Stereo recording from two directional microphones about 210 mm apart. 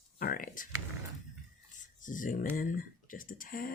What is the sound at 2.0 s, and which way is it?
Speech, 40° left (ahead or behind).